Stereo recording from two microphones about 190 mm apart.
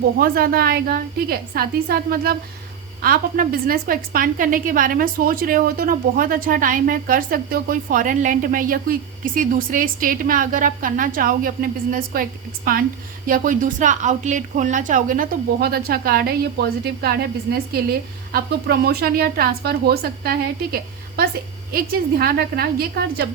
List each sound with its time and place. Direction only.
0.2 s a woman's voice: 50° right (ahead or behind)
21.7 s a woman's voice: 50° right (ahead or behind)